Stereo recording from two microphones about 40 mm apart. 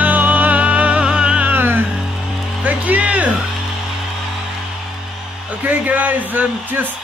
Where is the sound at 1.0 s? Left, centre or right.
Right.